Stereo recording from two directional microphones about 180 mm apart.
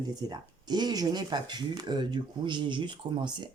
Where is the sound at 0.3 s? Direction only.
25° right (ahead or behind).